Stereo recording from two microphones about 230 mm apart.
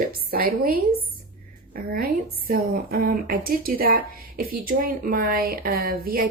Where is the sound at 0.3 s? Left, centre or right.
Right.